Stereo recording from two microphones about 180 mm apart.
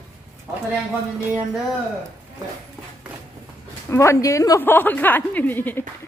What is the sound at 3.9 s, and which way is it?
A woman's voice, 15° left (ahead or behind).